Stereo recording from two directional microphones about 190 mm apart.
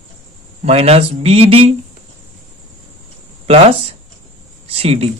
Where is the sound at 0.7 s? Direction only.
35° right (ahead or behind).